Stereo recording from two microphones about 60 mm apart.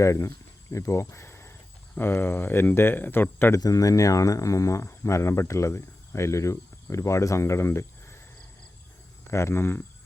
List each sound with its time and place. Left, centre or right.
0.0 s speech: left
2.0 s speech: left
3.6 s speech: left
9.3 s speech: left